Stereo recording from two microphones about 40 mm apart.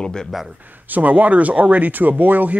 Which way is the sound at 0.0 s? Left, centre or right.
Centre.